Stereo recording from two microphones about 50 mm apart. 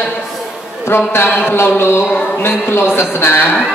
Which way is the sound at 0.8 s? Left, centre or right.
Left.